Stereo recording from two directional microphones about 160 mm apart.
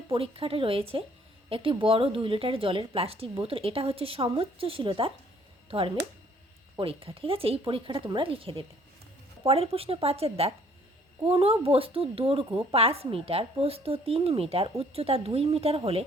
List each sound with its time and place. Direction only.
0.1 s speech: 35° right (ahead or behind)